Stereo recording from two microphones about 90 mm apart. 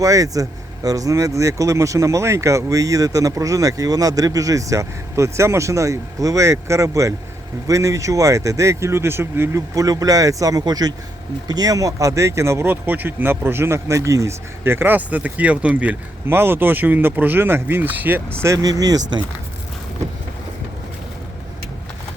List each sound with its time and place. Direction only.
0.0 s speech: 40° right (ahead or behind)
9.7 s speech: 40° right (ahead or behind); by 18.3 s 20° right (ahead or behind)
18.4 s speech: 40° right (ahead or behind)